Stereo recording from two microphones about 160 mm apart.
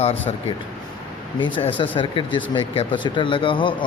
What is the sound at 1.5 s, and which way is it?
Speech, 30° left (ahead or behind).